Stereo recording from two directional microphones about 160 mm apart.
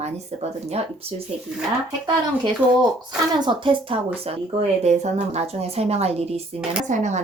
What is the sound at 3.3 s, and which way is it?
Speech, 30° right (ahead or behind).